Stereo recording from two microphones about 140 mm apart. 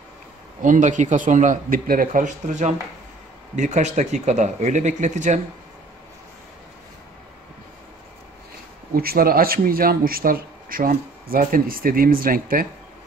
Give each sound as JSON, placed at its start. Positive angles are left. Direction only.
{"t": 0.6, "sound": "speech", "side_deg": -65}
{"t": 8.9, "sound": "speech", "side_deg": -90}